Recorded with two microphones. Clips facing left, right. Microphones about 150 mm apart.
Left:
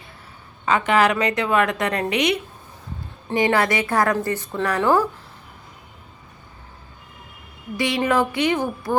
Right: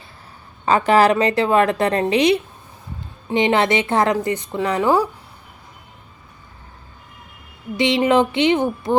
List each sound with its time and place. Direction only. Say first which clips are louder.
0.6 s a woman's voice: right 4 dB; 35° right (ahead or behind); by 5.0 s 15° right (ahead or behind)
7.8 s a woman's voice: right 4 dB; 25° right (ahead or behind)